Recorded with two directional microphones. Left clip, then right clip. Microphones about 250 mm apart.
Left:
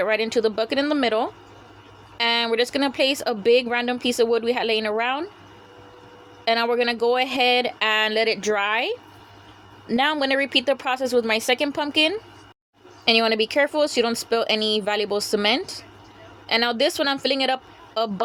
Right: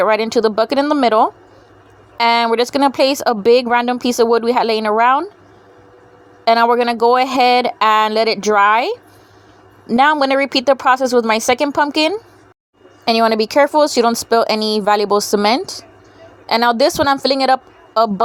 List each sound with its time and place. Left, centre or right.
0.0 s speech: right
6.4 s speech: right